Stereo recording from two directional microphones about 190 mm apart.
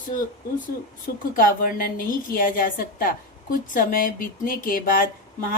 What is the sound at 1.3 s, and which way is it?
A woman's voice, 50° left (ahead or behind).